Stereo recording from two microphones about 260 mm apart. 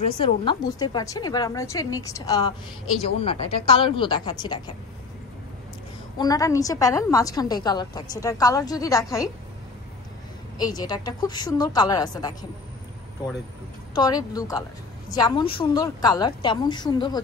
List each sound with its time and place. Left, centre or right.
0.0 s a woman's voice: centre
6.1 s a woman's voice: centre
10.6 s a woman's voice: centre
13.9 s a woman's voice: centre